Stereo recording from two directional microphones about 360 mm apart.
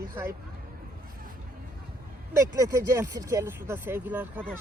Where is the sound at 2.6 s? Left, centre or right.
Centre.